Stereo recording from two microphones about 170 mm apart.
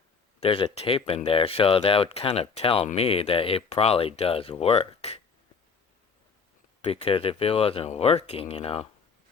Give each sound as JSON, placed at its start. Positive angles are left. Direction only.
{"t": 0.3, "sound": "speech", "side_deg": 35}
{"t": 6.8, "sound": "speech", "side_deg": 35}